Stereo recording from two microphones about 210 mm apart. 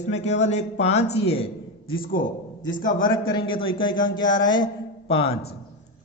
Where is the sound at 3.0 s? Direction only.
25° left (ahead or behind).